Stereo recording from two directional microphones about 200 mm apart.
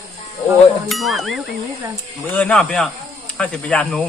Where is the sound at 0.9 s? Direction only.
Centre (ahead or behind).